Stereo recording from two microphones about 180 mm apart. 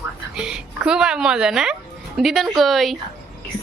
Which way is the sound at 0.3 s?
5° right (ahead or behind).